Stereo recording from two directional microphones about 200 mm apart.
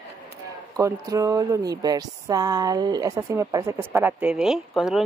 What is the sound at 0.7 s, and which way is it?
Speech, 15° right (ahead or behind).